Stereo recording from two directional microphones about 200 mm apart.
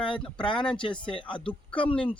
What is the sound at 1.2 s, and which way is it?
Speech, 25° left (ahead or behind).